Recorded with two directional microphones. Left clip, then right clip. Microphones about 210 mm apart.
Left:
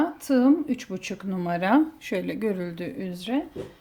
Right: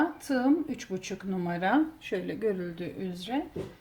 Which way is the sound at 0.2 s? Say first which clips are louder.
Left 6 dB; 45° left (ahead or behind).